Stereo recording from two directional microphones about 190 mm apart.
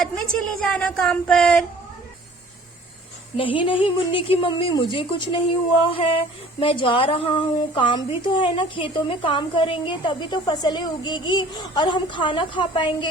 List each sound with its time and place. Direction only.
0.0 s speech: 5° left (ahead or behind)
3.3 s speech: 25° left (ahead or behind)